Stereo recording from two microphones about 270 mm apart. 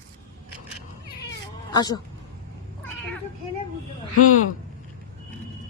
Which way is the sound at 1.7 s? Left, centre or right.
Centre.